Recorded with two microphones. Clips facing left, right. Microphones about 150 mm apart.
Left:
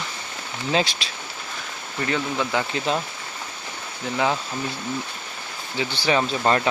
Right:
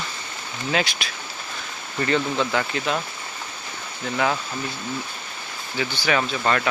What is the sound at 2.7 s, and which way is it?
Speech, 25° left (ahead or behind).